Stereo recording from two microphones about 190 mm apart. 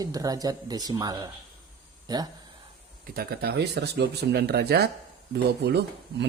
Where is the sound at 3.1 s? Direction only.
55° right (ahead or behind).